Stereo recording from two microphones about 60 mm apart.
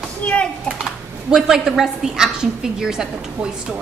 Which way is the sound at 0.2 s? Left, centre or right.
Left.